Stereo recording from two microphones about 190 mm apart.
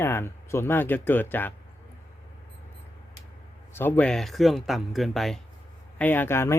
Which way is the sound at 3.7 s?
10° left (ahead or behind).